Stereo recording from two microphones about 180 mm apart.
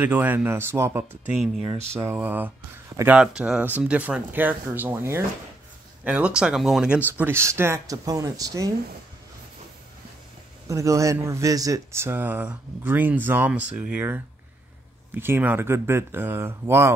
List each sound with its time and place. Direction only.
0.0 s speech: 10° right (ahead or behind)
2.0 s speech: 10° right (ahead or behind)
7.2 s speech: 15° right (ahead or behind)
10.7 s speech: 15° right (ahead or behind)